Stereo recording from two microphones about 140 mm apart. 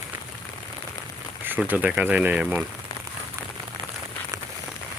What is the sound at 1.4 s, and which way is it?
Speech, 10° right (ahead or behind).